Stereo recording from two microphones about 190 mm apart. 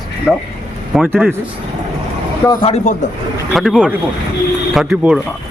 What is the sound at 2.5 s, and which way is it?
Speech, 30° left (ahead or behind).